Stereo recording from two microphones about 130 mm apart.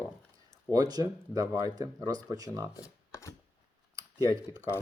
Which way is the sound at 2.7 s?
25° left (ahead or behind).